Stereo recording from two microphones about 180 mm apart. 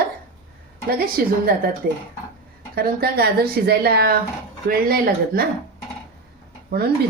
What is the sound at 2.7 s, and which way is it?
Speech, 55° right (ahead or behind).